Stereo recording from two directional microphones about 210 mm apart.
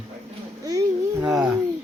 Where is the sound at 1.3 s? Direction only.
Centre (ahead or behind).